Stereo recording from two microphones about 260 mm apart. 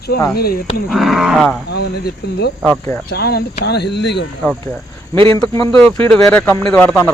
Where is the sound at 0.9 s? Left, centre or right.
Centre.